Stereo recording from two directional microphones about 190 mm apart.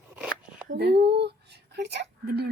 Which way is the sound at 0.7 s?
60° right (ahead or behind).